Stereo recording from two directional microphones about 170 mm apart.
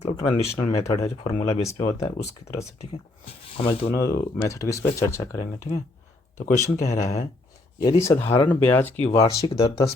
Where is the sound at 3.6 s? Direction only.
35° left (ahead or behind).